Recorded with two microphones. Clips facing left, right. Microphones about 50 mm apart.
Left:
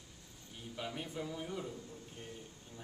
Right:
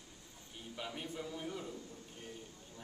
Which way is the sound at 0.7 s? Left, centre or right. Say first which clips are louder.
Left 2 dB; centre.